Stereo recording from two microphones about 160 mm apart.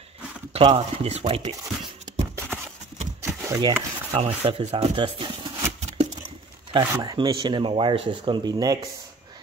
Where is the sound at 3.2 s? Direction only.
20° right (ahead or behind).